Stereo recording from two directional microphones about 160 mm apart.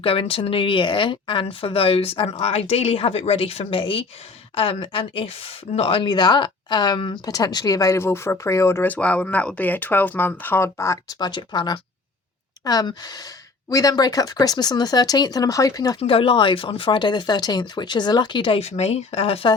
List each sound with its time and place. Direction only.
0.0 s a woman's voice: 35° left (ahead or behind)
16.0 s speech: 35° left (ahead or behind)